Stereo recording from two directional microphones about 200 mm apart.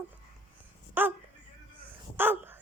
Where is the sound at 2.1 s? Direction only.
10° right (ahead or behind).